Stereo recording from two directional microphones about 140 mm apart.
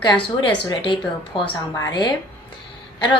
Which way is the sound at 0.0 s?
35° left (ahead or behind).